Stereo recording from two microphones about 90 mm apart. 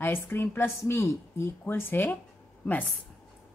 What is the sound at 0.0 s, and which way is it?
Speech, 25° left (ahead or behind).